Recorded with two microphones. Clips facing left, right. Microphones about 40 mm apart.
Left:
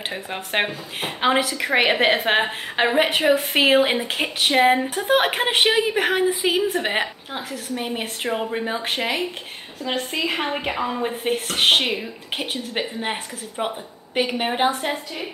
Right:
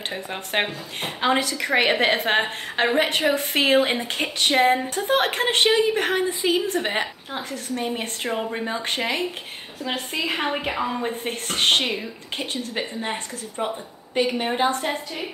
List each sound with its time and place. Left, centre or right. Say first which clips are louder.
0.1 s a woman's voice: even; centre
12.7 s a woman's voice: left 3 dB; left
14.2 s a woman's voice: left 1 dB; centre